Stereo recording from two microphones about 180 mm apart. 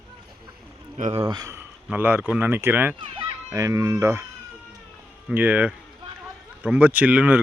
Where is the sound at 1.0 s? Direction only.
35° right (ahead or behind); by 4.2 s 15° right (ahead or behind).